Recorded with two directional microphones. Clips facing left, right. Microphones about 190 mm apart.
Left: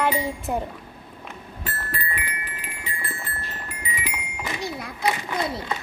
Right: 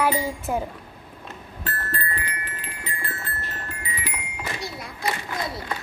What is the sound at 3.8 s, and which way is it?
Music, 15° left (ahead or behind).